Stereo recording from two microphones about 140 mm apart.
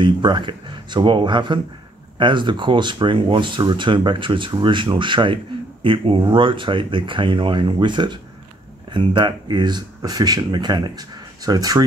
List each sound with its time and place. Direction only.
0.0 s speech: 35° right (ahead or behind)